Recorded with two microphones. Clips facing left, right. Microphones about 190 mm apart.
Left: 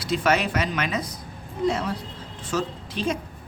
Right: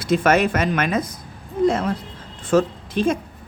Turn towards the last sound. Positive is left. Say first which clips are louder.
# right 6 dB
turn(degrees=-50)  # may be behind; listen again after turning